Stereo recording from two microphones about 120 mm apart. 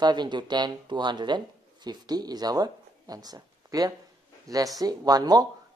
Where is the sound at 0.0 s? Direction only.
35° right (ahead or behind).